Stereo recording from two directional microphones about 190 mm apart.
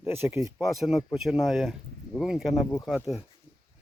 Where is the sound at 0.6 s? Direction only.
Centre (ahead or behind).